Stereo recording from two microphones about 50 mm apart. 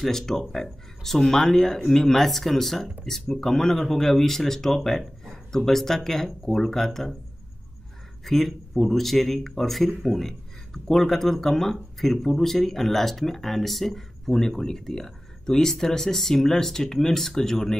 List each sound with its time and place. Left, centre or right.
0.0 s speech: centre
8.2 s speech: centre